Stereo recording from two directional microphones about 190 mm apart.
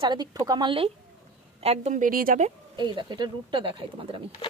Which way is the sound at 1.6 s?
35° right (ahead or behind).